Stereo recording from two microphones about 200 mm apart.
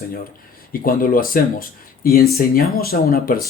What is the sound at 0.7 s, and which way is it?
Speech, 45° left (ahead or behind).